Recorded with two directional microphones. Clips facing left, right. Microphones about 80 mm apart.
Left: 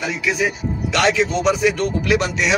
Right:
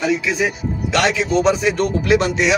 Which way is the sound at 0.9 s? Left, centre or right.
Right.